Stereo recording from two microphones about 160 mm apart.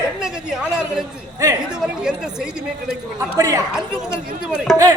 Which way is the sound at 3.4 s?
20° right (ahead or behind).